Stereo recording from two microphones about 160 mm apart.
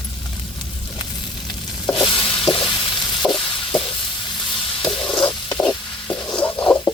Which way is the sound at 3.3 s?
Centre (ahead or behind).